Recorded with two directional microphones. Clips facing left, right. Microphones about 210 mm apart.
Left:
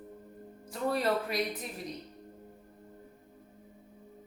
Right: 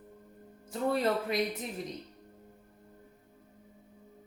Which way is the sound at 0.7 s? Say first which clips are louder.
Right 1 dB; 25° right (ahead or behind).